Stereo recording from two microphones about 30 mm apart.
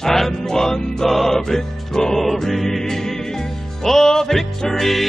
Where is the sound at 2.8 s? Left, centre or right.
Centre.